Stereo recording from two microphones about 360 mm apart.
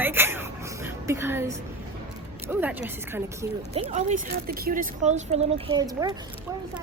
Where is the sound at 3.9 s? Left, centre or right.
Right.